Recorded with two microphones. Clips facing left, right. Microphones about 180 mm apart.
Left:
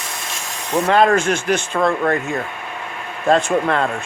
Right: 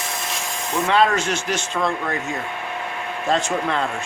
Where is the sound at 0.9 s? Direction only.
50° left (ahead or behind).